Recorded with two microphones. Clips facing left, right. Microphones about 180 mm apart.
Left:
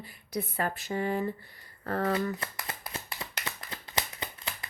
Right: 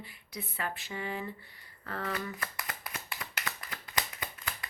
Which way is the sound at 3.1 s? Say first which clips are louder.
Left 1 dB; 25° left (ahead or behind).